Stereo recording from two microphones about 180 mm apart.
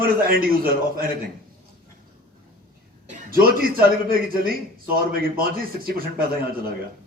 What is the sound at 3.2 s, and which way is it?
Speech, 55° right (ahead or behind).